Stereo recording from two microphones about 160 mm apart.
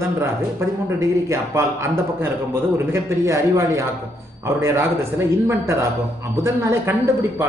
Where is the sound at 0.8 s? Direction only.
20° right (ahead or behind).